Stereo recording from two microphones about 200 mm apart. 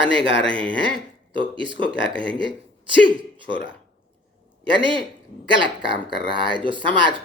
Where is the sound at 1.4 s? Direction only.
25° right (ahead or behind).